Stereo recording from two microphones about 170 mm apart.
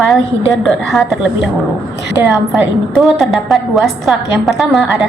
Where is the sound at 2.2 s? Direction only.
15° right (ahead or behind).